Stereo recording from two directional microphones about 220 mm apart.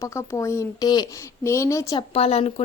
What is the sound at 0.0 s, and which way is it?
Speech, 15° left (ahead or behind).